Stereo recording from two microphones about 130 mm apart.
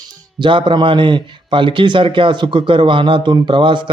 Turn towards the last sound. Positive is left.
turn(degrees=-40)  # may be behind; listen again after turning